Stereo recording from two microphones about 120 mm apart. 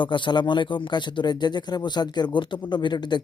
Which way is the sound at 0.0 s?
40° left (ahead or behind).